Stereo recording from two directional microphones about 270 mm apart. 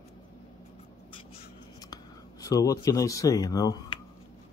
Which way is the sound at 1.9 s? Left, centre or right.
Centre.